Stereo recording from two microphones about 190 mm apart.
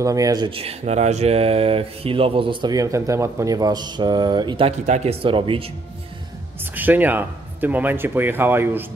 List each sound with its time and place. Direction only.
0.0 s speech: 20° right (ahead or behind)
6.6 s speech: 10° right (ahead or behind)